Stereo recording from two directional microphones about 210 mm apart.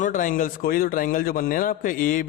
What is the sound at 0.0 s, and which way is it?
A man's voice, 40° left (ahead or behind).